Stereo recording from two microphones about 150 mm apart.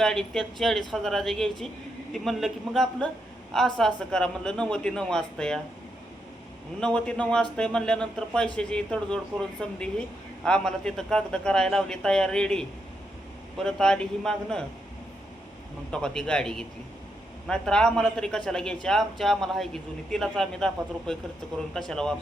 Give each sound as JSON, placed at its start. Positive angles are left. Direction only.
{"t": 0.0, "sound": "speech", "side_deg": 5}
{"t": 6.7, "sound": "speech", "side_deg": 5}
{"t": 15.9, "sound": "speech", "side_deg": 5}